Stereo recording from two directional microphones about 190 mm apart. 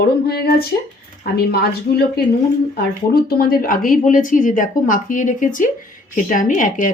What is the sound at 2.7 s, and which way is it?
A woman's voice, 55° left (ahead or behind).